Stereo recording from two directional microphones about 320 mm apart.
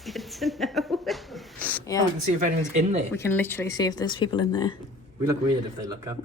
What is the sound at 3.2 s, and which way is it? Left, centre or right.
Speech, centre.